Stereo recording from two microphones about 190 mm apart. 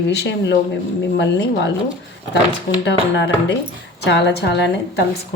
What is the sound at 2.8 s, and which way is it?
A woman's voice, 65° left (ahead or behind).